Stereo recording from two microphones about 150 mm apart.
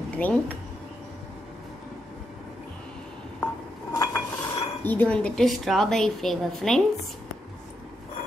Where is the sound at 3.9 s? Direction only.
25° left (ahead or behind).